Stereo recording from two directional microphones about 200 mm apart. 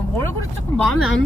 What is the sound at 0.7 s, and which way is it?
Vehicle, 5° left (ahead or behind).